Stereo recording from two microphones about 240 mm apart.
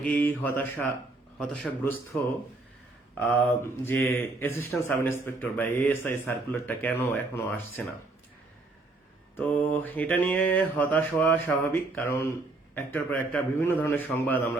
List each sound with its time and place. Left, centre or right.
0.0 s mantra: centre
1.4 s a man's voice: centre
3.6 s mantra: centre
9.4 s mantra: centre